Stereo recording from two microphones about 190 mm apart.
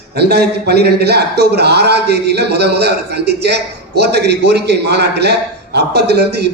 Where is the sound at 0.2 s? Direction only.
60° right (ahead or behind).